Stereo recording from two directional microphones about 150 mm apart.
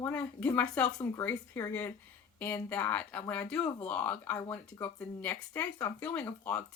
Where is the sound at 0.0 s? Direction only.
10° left (ahead or behind).